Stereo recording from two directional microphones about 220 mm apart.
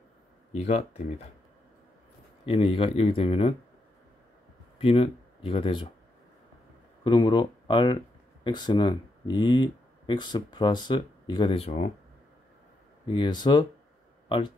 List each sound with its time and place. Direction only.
0.5 s speech: 30° left (ahead or behind)
2.4 s speech: 25° left (ahead or behind)
4.7 s speech: 25° left (ahead or behind)
7.1 s speech: 20° left (ahead or behind)
13.1 s speech: 20° left (ahead or behind)